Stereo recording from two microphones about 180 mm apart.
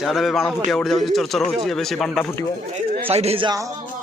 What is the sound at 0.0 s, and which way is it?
Speech, centre (ahead or behind).